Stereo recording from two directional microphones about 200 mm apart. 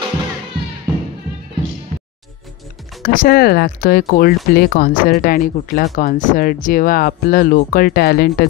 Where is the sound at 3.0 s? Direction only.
45° left (ahead or behind).